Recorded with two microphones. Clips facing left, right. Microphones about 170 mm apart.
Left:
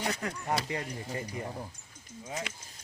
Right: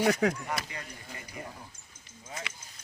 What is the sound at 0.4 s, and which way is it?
Speech, 30° left (ahead or behind).